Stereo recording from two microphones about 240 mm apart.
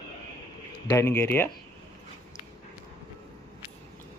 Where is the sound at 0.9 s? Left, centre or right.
Centre.